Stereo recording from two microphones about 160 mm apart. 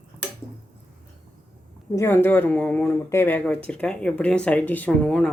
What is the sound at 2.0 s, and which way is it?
Speech, 15° left (ahead or behind).